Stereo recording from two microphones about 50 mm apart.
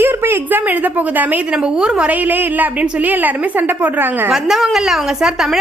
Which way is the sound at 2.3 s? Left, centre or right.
Right.